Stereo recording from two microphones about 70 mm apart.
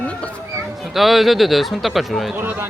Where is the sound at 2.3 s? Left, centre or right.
Right.